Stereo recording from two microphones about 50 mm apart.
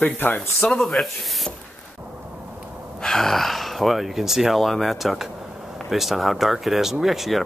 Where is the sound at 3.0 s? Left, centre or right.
Centre.